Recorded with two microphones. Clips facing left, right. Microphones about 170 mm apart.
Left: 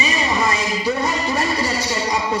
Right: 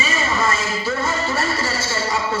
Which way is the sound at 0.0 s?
15° left (ahead or behind).